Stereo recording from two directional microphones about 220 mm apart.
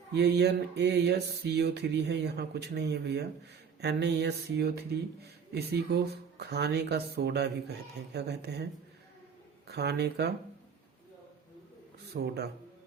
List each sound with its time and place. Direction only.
0.1 s speech: 50° right (ahead or behind)
12.1 s speech: 45° right (ahead or behind)